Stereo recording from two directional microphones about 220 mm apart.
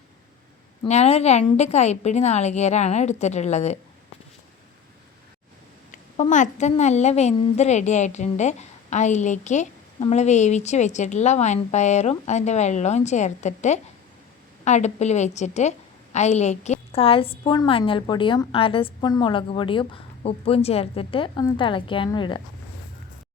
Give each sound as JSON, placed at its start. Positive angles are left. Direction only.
{"t": 0.9, "sound": "a woman's voice", "side_deg": 30}
{"t": 5.9, "sound": "a woman's voice", "side_deg": 35}